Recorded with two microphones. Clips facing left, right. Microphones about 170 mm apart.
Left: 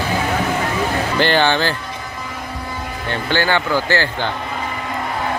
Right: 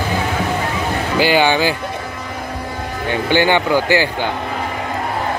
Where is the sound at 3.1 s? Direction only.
15° right (ahead or behind).